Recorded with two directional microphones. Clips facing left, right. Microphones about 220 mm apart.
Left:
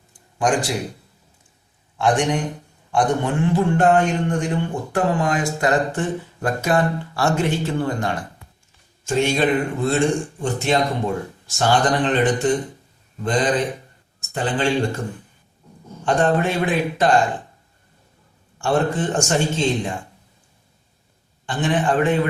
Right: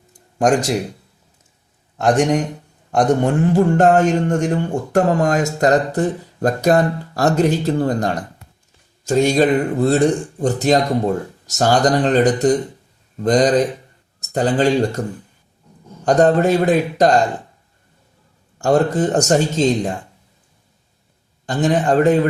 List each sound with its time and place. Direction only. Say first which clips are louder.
0.1 s a sound: right 5 dB; 45° right (ahead or behind)
2.0 s a man's voice: right 4 dB; 45° right (ahead or behind)
16.0 s a man's voice: right 5 dB; 40° right (ahead or behind)
18.6 s a man's voice: right 5 dB; 40° right (ahead or behind)
21.4 s a man's voice: right 4 dB; 40° right (ahead or behind)